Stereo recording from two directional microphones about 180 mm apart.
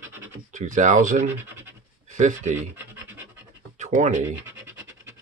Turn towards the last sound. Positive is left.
turn(degrees=-15)  # may be behind; listen again after turning